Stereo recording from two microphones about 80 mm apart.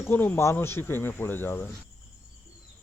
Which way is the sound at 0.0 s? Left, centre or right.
Left.